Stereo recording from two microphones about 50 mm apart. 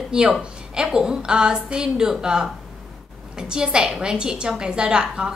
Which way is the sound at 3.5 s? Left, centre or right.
Centre.